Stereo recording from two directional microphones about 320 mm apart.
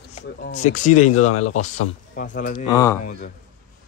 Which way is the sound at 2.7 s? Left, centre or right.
Centre.